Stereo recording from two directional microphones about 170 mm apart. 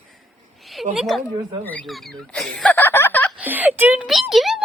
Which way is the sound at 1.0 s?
Centre (ahead or behind).